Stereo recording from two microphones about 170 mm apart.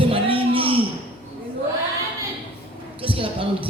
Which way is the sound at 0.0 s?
30° right (ahead or behind).